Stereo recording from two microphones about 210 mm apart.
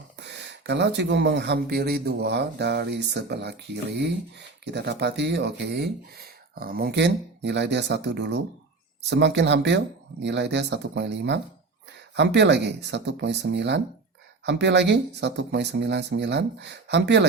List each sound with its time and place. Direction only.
0.2 s speech: 55° right (ahead or behind)